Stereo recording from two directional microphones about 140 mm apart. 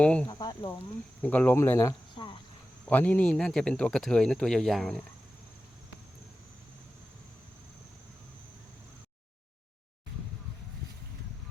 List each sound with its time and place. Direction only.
0.0 s speech: 10° left (ahead or behind)
0.3 s speech: 30° left (ahead or behind)
1.2 s speech: 10° left (ahead or behind)
2.1 s cricket: 35° left (ahead or behind)
2.8 s speech: 10° left (ahead or behind)